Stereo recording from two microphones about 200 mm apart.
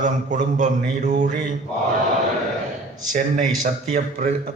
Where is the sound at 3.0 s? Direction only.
40° right (ahead or behind).